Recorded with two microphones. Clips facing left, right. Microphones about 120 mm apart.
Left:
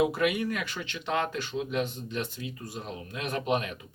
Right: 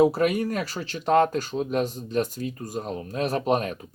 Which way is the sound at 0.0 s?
40° right (ahead or behind).